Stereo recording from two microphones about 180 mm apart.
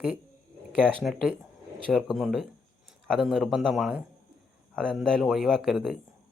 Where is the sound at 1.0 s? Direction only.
Centre (ahead or behind).